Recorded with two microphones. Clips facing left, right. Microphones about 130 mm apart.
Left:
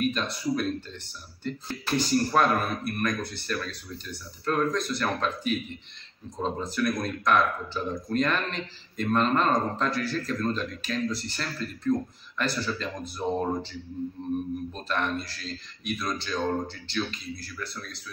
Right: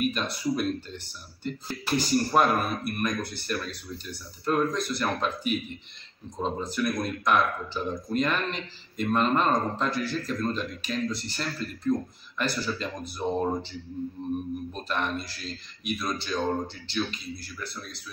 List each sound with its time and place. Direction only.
0.0 s speech: 5° right (ahead or behind)